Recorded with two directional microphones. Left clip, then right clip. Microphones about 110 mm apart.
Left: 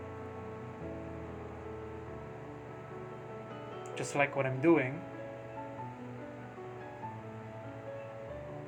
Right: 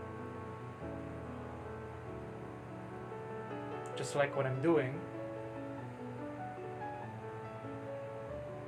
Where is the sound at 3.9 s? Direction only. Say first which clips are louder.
Left 2 dB; 85° left.